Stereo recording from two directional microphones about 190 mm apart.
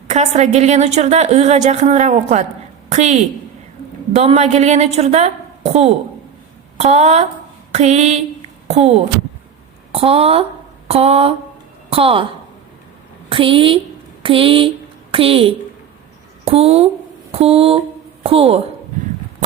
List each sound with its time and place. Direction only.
0.1 s a woman's voice: 35° right (ahead or behind)
13.3 s a woman's voice: 30° right (ahead or behind)